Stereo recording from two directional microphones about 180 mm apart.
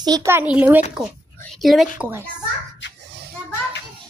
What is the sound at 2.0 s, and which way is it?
Speech, 5° right (ahead or behind).